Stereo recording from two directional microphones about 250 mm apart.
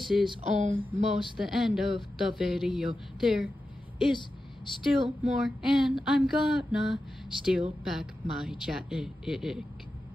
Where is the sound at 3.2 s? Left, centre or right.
Centre.